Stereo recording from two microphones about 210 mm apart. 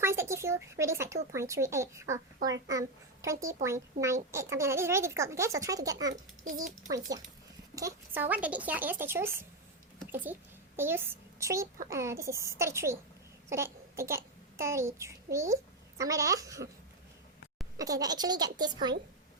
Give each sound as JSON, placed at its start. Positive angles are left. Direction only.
{"t": 0.0, "sound": "speech", "side_deg": -10}
{"t": 7.8, "sound": "speech", "side_deg": -10}
{"t": 10.8, "sound": "a child's voice", "side_deg": -10}
{"t": 17.7, "sound": "a woman's voice", "side_deg": -15}